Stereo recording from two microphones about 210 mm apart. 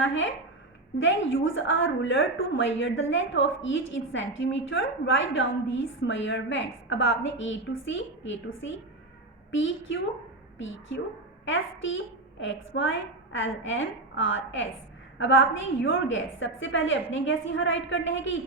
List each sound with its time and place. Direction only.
0.0 s a woman's voice: 65° left (ahead or behind)